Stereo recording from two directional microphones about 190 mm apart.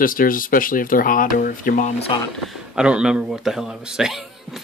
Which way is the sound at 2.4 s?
Centre (ahead or behind).